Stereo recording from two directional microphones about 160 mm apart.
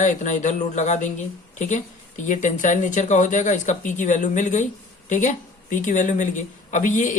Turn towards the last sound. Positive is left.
turn(degrees=55)  # may be behind; listen again after turning